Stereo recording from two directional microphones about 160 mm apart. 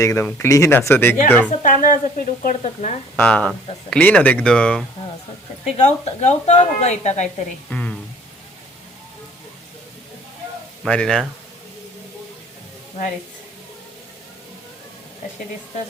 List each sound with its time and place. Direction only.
0.0 s speech: 20° left (ahead or behind)
1.5 s speech: 55° left (ahead or behind)
3.2 s speech: 10° left (ahead or behind)
5.7 s a woman's voice: 45° left (ahead or behind)
7.7 s speech: 5° left (ahead or behind)
10.8 s speech: 5° left (ahead or behind)